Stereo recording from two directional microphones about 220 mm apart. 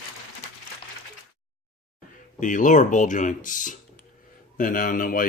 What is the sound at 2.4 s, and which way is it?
Speech, 35° left (ahead or behind).